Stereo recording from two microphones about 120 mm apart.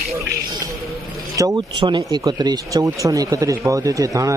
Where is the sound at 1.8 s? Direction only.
45° right (ahead or behind).